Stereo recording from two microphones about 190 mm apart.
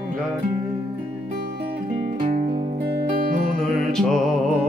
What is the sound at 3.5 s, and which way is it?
Music, centre (ahead or behind).